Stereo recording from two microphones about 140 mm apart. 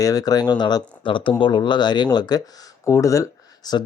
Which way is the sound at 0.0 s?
25° left (ahead or behind).